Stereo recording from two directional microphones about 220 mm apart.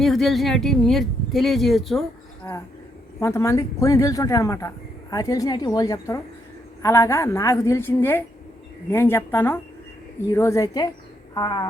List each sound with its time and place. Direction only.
0.0 s speech: centre (ahead or behind)
3.2 s a woman's voice: 10° left (ahead or behind)